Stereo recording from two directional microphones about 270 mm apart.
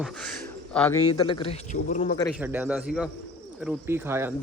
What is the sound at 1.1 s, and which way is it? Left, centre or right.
A man's voice, centre.